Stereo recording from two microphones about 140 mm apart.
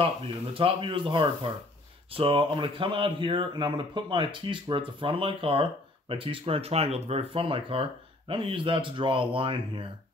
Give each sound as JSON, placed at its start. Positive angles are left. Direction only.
{"t": 0.6, "sound": "speech", "side_deg": -40}